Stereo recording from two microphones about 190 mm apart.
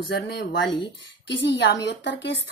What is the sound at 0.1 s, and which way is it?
Speech, 60° left (ahead or behind).